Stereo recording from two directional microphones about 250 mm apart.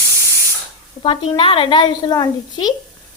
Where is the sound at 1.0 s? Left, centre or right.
Centre.